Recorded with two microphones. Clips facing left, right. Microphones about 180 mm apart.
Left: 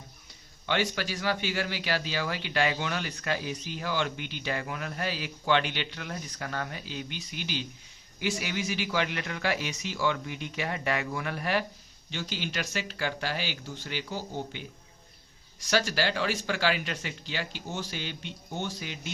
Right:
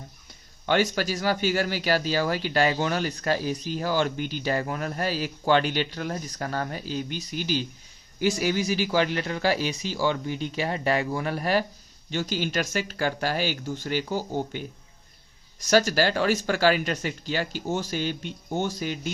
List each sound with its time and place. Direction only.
0.6 s speech: 45° right (ahead or behind)
15.6 s speech: 45° right (ahead or behind)